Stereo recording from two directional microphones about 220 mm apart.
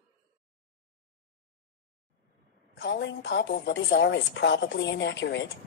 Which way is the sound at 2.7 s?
50° left (ahead or behind).